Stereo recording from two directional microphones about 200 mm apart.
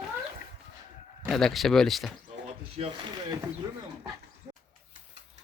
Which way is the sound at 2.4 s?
25° right (ahead or behind).